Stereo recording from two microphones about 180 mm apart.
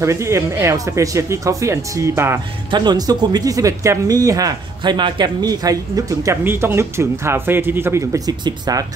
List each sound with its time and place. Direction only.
0.0 s speech: 15° right (ahead or behind)